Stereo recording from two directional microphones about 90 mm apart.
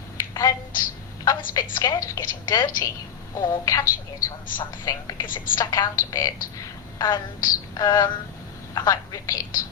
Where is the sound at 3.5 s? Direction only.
40° left (ahead or behind).